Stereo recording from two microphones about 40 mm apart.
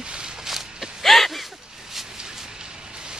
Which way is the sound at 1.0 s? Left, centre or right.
Centre.